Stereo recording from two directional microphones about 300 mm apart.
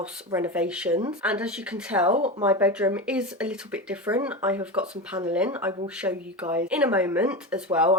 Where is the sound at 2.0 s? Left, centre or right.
Right.